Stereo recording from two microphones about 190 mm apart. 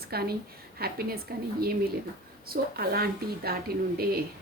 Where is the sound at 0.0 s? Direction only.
55° right (ahead or behind).